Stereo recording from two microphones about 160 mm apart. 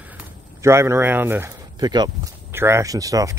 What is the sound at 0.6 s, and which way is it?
Speech, 15° right (ahead or behind).